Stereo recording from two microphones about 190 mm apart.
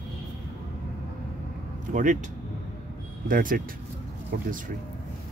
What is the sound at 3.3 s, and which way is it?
Speech, 50° right (ahead or behind).